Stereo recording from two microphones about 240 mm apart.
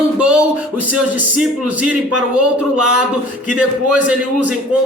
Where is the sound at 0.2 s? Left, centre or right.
Centre.